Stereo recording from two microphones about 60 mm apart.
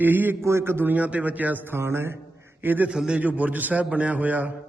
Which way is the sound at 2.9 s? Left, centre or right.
Centre.